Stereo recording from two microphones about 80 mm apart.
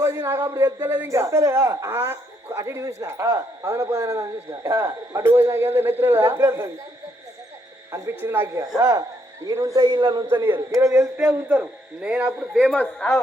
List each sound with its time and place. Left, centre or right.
0.0 s speech: right
8.2 s speech: right
8.8 s speech: right
9.5 s speech: right
9.7 s a man's voice: right
10.7 s speech: right
11.2 s a man's voice: right
12.7 s speech: centre